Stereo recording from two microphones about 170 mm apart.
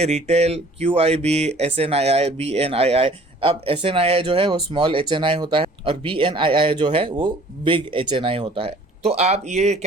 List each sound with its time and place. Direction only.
0.0 s speech: 40° right (ahead or behind)